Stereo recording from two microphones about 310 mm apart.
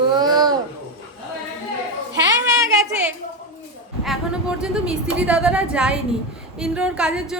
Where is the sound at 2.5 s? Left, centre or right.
Centre.